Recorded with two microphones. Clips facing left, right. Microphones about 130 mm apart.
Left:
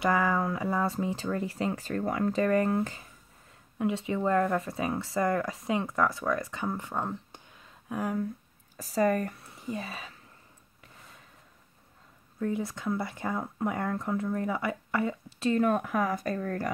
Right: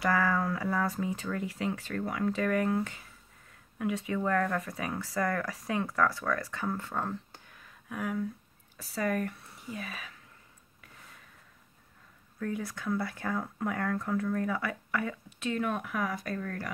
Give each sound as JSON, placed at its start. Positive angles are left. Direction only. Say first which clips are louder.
{"t": 0.0, "sound": "speech", "louder": "left 2 dB", "side_deg": 20}
{"t": 8.0, "sound": "speech", "louder": "left 2 dB", "side_deg": 40}
{"t": 12.4, "sound": "speech", "louder": "left 4 dB", "side_deg": 25}